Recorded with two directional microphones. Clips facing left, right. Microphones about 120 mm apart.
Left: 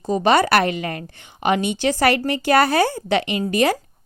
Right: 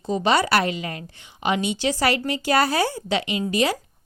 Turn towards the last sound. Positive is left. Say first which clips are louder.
# left 3 dB
turn(degrees=50)  # may be behind; listen again after turning